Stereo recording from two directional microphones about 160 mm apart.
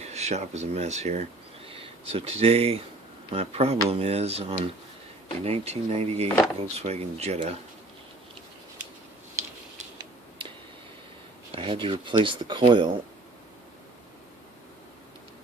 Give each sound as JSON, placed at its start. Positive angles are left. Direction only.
{"t": 0.0, "sound": "speech", "side_deg": -45}
{"t": 11.5, "sound": "speech", "side_deg": -35}